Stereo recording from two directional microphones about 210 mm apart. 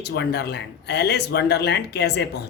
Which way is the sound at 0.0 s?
50° left (ahead or behind).